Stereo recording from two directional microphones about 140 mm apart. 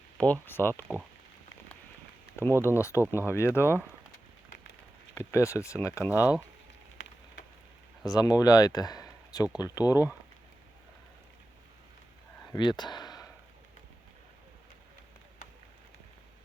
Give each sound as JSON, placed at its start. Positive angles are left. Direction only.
{"t": 0.2, "sound": "speech", "side_deg": 15}
{"t": 2.6, "sound": "speech", "side_deg": 20}
{"t": 5.1, "sound": "speech", "side_deg": 20}
{"t": 8.0, "sound": "speech", "side_deg": 25}
{"t": 12.5, "sound": "a sound", "side_deg": 30}